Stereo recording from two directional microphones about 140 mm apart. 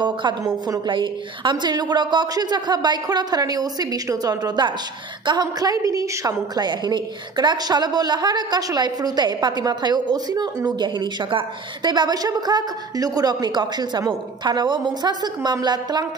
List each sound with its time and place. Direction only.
0.0 s a woman's voice: 35° right (ahead or behind)